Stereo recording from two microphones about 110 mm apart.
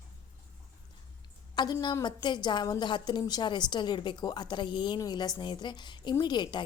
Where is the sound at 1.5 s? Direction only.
40° left (ahead or behind).